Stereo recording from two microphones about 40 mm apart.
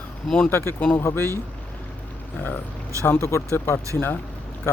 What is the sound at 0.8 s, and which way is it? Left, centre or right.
Speech, left.